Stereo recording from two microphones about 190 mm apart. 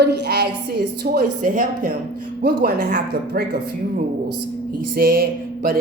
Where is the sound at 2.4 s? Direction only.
55° right (ahead or behind).